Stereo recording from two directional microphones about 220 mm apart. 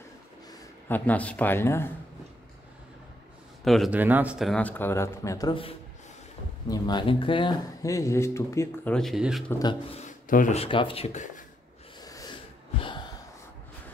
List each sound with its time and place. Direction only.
0.5 s speech: 10° left (ahead or behind)
3.6 s speech: centre (ahead or behind)
9.5 s speech: 20° left (ahead or behind)
12.0 s sneeze: 15° left (ahead or behind)
12.8 s a sound: 20° left (ahead or behind)